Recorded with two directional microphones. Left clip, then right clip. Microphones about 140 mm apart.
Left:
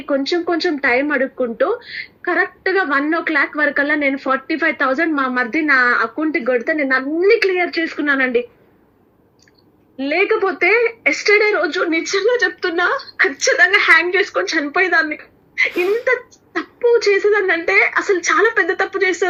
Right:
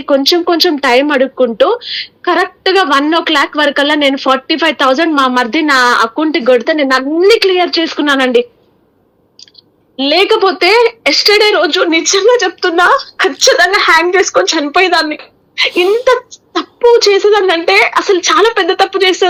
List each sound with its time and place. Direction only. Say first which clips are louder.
0.0 s a woman's voice: right 9 dB; 30° right (ahead or behind)
10.0 s a woman's voice: right 7 dB; 35° right (ahead or behind)